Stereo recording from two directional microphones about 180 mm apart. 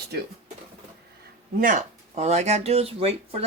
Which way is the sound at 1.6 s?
45° right (ahead or behind).